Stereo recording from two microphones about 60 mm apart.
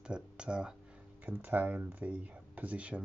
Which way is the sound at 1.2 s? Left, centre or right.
Right.